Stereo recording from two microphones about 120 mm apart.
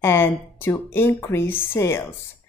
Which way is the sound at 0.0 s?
20° left (ahead or behind).